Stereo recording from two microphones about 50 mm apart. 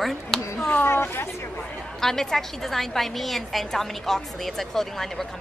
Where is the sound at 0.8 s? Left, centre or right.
Left.